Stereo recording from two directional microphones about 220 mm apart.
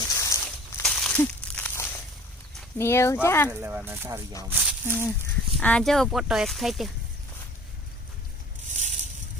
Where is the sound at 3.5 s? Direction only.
10° right (ahead or behind).